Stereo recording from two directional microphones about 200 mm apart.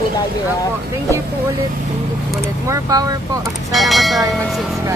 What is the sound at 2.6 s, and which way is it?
Speech, 15° right (ahead or behind).